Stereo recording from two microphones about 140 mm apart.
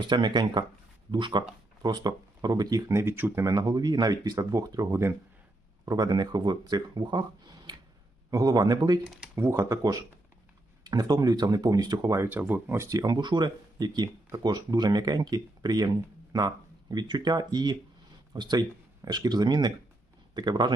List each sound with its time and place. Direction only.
0.0 s speech: 35° right (ahead or behind)
16.9 s speech: 30° right (ahead or behind)